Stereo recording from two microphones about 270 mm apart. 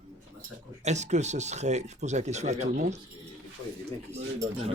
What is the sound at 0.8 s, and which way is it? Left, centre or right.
Speech, right.